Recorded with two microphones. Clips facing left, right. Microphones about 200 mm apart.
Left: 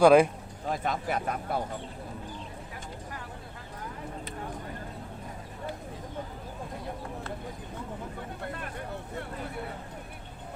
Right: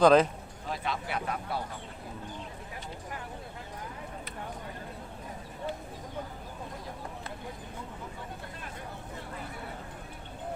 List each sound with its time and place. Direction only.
0.0 s speech: 10° left (ahead or behind)
0.7 s speech: 45° left (ahead or behind)